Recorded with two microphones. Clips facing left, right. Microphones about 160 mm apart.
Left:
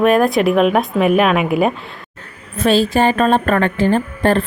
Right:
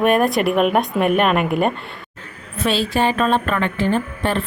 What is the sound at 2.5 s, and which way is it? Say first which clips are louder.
A woman's voice: left 5 dB; 45° left (ahead or behind).